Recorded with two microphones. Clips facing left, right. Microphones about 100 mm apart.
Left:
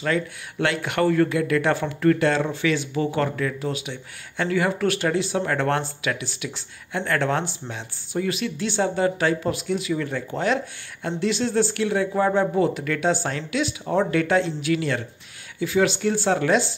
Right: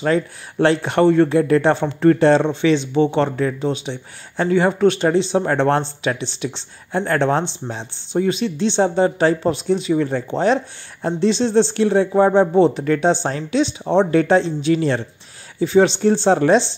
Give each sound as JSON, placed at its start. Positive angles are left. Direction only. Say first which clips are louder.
{"t": 0.0, "sound": "speech", "louder": "right 6 dB", "side_deg": -30}